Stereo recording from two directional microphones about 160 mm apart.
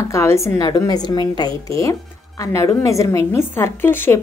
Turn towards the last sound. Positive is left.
turn(degrees=15)  # may be behind; listen again after turning